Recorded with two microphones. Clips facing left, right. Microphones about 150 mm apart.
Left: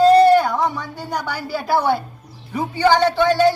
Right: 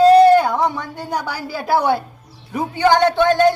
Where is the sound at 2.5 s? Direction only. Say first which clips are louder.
Right 1 dB; 15° right (ahead or behind).